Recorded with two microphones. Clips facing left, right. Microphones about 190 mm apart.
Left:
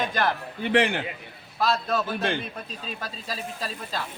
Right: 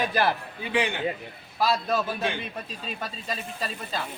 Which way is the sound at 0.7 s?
80° left.